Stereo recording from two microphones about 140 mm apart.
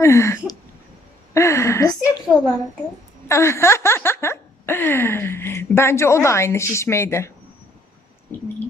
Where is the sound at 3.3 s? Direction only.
20° left (ahead or behind).